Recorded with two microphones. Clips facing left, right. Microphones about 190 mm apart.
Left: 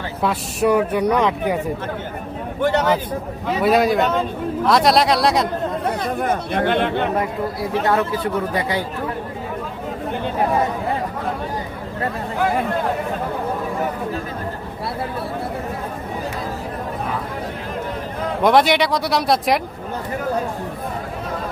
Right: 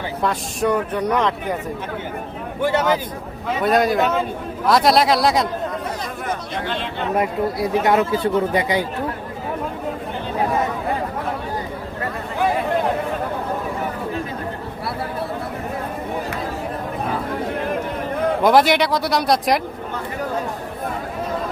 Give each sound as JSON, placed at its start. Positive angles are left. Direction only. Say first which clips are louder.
{"t": 0.2, "sound": "speech", "louder": "left 2 dB", "side_deg": 5}
{"t": 2.6, "sound": "a man's voice", "louder": "left 1 dB", "side_deg": -10}
{"t": 3.6, "sound": "speech", "louder": "left 1 dB", "side_deg": 0}
{"t": 6.1, "sound": "speech", "louder": "left 6 dB", "side_deg": 55}
{"t": 7.2, "sound": "speech", "louder": "right 2 dB", "side_deg": -20}
{"t": 18.4, "sound": "speech", "louder": "left 1 dB", "side_deg": 0}